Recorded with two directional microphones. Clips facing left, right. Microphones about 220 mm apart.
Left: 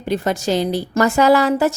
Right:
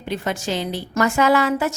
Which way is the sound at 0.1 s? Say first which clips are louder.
Left 6 dB; 40° left (ahead or behind).